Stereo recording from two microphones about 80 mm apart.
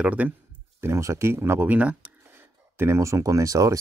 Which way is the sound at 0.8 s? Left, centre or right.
Right.